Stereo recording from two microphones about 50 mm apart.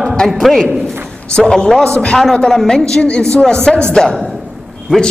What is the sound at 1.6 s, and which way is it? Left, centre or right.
A man's voice, centre.